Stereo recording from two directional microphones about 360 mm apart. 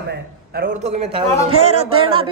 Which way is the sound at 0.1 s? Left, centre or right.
Right.